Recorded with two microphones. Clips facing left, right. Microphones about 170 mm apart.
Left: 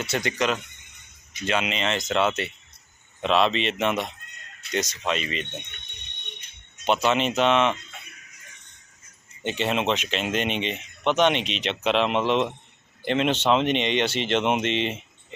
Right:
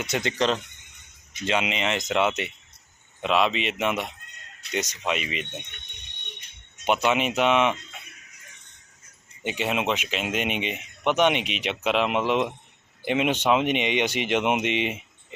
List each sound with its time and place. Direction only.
0.0 s speech: 20° right (ahead or behind)
1.5 s speech: 20° right (ahead or behind)
6.8 s speech: 10° right (ahead or behind)
9.4 s speech: 10° right (ahead or behind)